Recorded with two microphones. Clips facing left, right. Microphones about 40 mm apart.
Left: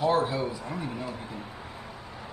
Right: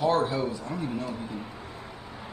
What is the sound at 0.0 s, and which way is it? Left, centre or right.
A man's voice, centre.